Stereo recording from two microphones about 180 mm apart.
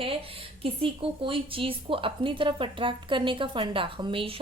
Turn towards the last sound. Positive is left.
turn(degrees=-30)  # may be behind; listen again after turning